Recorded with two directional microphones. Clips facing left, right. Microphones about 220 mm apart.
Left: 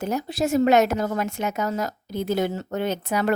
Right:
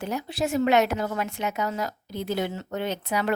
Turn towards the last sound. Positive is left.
turn(degrees=45)  # may be behind; listen again after turning